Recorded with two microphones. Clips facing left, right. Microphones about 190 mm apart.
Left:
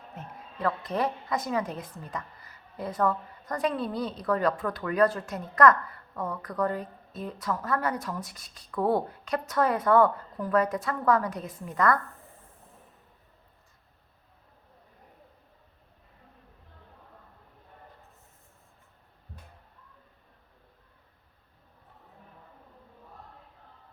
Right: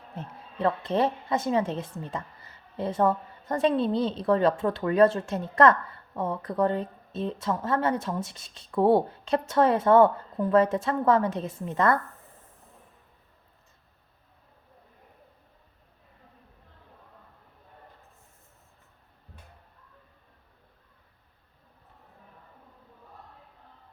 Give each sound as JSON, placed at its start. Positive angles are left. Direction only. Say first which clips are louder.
{"t": 0.2, "sound": "a woman's voice", "louder": "right 4 dB", "side_deg": -25}